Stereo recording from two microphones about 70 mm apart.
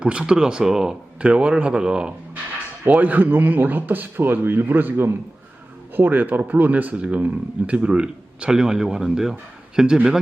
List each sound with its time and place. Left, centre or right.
0.0 s a man's voice: centre
1.3 s a man's voice: right